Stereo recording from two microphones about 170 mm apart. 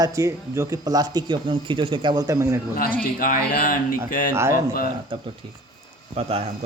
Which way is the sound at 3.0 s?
55° left (ahead or behind).